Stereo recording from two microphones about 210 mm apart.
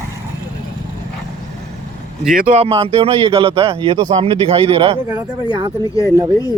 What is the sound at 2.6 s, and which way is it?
A man's voice, 25° right (ahead or behind).